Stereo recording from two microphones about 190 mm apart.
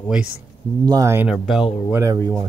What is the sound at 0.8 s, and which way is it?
Speech, 15° right (ahead or behind).